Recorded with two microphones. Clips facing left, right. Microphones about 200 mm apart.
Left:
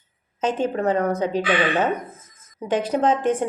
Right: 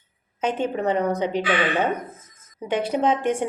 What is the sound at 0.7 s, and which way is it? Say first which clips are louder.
Speech: left 1 dB; 15° right (ahead or behind).